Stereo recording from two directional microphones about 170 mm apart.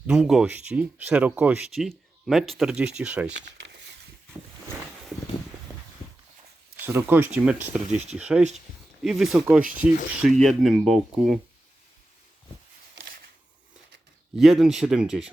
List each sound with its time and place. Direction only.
0.1 s speech: 5° right (ahead or behind)
3.6 s a sound: 80° right
6.7 s speech: 10° right (ahead or behind)
14.3 s speech: centre (ahead or behind)